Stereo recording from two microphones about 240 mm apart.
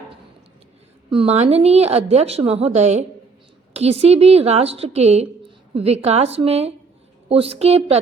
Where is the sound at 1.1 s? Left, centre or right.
Right.